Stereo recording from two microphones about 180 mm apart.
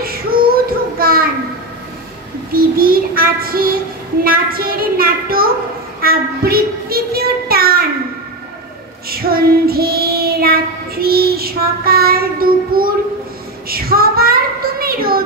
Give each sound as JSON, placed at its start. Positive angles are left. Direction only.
{"t": 0.0, "sound": "child singing", "side_deg": -55}
{"t": 2.5, "sound": "child singing", "side_deg": -55}
{"t": 9.1, "sound": "child singing", "side_deg": -55}